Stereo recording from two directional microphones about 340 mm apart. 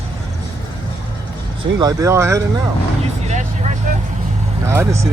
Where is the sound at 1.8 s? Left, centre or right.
Centre.